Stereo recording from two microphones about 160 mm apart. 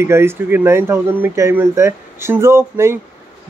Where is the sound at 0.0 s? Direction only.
15° right (ahead or behind).